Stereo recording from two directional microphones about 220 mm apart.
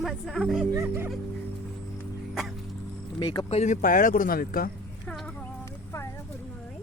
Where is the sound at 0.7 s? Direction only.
10° right (ahead or behind).